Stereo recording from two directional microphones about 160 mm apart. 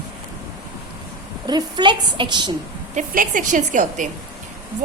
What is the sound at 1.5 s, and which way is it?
A woman's voice, 25° right (ahead or behind).